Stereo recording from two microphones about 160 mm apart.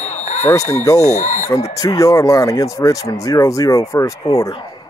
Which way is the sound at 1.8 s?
20° left (ahead or behind).